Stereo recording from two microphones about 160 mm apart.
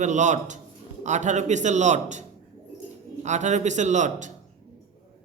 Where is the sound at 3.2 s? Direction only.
45° right (ahead or behind).